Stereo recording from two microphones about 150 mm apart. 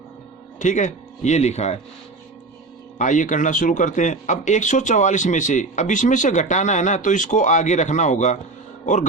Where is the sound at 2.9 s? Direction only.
55° left (ahead or behind).